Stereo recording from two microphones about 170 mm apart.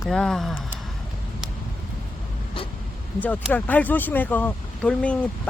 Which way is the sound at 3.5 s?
10° left (ahead or behind).